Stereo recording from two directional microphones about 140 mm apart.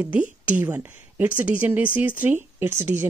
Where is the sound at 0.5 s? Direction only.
15° right (ahead or behind).